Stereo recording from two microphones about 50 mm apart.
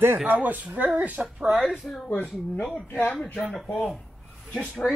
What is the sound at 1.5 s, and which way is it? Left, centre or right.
Speech, centre.